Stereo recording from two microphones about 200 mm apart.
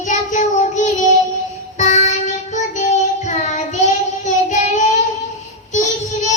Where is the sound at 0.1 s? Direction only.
35° left (ahead or behind).